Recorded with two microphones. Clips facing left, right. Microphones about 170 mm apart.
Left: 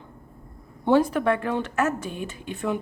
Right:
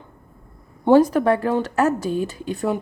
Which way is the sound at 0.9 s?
40° right (ahead or behind).